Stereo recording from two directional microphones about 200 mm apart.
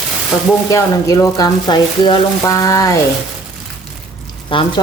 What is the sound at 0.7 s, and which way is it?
Speech, 15° left (ahead or behind).